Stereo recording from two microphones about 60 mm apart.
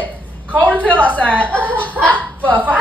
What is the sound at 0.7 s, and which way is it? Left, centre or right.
Speech, left.